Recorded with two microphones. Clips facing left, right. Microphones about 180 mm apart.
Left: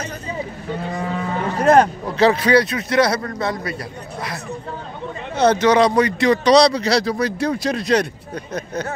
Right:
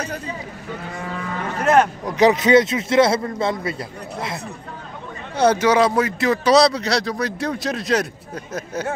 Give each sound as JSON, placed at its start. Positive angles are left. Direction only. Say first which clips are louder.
{"t": 1.3, "sound": "a sound", "louder": "left 3 dB", "side_deg": 35}
{"t": 2.0, "sound": "speech", "louder": "right 1 dB", "side_deg": -15}
{"t": 5.4, "sound": "speech", "louder": "left 1 dB", "side_deg": -10}